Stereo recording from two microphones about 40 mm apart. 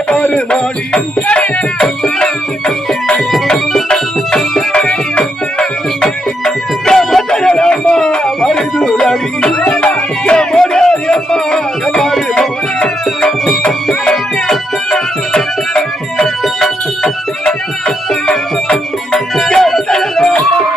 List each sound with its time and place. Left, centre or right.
0.9 s music: left
1.8 s music: centre
3.4 s music: centre
4.9 s music: left
6.0 s music: centre
7.3 s music: centre
12.3 s music: left
19.5 s music: centre